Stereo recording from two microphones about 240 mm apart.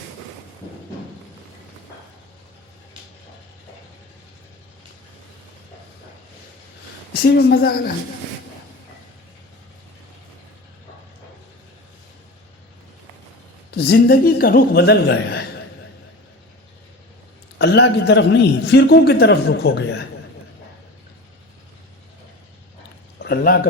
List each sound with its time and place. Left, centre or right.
7.1 s speech: left
13.7 s a man's voice: left
17.6 s a man's voice: left
23.2 s a sound: left